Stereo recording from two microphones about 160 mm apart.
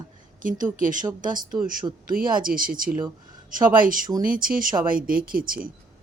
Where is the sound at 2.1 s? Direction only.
60° right (ahead or behind).